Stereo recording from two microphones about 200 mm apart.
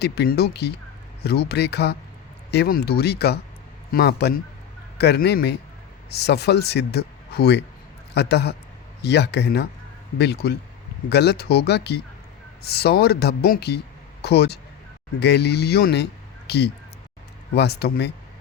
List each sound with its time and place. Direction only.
0.0 s speech: 55° left (ahead or behind)